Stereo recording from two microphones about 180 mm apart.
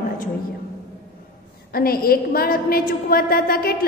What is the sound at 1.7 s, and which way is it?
A woman's voice, 55° left (ahead or behind).